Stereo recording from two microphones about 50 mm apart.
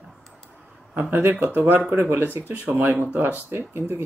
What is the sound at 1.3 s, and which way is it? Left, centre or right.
Speech, right.